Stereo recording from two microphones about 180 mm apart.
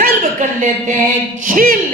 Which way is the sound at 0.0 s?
45° right (ahead or behind).